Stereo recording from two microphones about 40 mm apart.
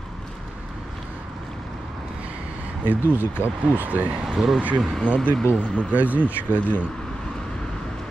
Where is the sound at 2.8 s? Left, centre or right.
Right.